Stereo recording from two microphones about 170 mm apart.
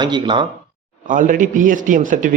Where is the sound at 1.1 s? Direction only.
50° right (ahead or behind).